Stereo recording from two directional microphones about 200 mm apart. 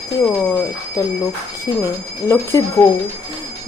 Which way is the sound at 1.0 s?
15° left (ahead or behind).